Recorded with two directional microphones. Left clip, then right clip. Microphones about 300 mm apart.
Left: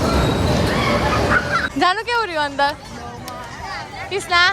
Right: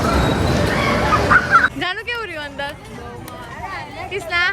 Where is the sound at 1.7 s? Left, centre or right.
Centre.